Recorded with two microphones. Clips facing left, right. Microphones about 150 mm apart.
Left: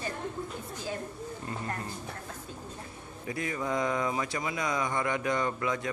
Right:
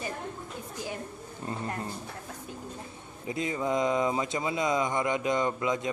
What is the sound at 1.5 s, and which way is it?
Speech, 30° right (ahead or behind).